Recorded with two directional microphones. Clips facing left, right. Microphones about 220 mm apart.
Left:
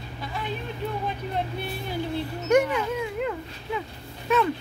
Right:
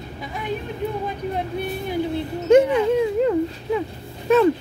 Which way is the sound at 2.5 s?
30° right (ahead or behind).